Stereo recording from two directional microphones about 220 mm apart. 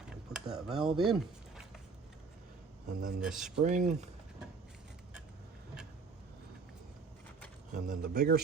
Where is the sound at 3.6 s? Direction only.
35° right (ahead or behind).